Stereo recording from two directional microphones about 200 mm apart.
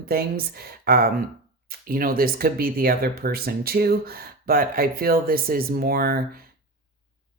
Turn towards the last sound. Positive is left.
turn(degrees=-50)  # may be behind; listen again after turning